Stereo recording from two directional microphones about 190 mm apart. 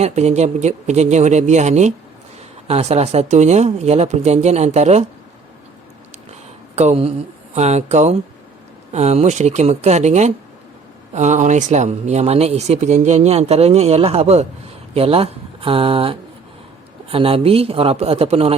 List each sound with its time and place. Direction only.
0.0 s speech: 35° right (ahead or behind)
6.7 s speech: 35° right (ahead or behind)